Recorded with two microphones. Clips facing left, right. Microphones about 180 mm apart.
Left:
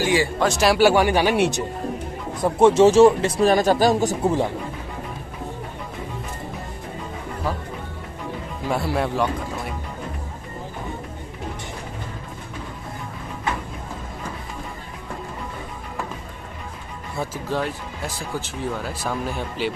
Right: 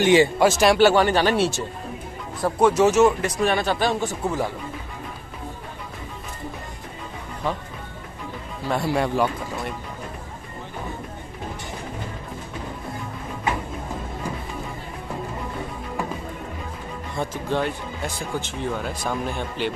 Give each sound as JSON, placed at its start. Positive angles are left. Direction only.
{"t": 0.0, "sound": "speech", "side_deg": -20}
{"t": 0.4, "sound": "speech", "side_deg": 0}
{"t": 2.4, "sound": "speech", "side_deg": 25}
{"t": 8.6, "sound": "speech", "side_deg": 0}
{"t": 17.1, "sound": "speech", "side_deg": 5}